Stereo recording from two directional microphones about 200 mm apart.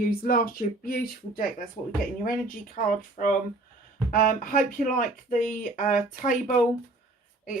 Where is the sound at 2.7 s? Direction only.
40° left (ahead or behind).